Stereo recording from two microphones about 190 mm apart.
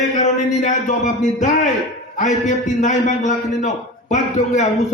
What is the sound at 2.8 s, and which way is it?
A man's voice, 40° left (ahead or behind).